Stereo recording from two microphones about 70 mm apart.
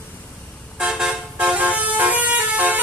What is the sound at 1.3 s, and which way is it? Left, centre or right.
Vehicle, centre.